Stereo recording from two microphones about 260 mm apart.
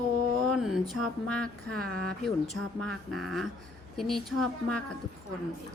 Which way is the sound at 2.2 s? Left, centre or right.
Centre.